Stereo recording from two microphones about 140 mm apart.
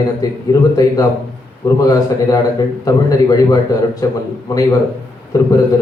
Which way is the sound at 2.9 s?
25° left (ahead or behind).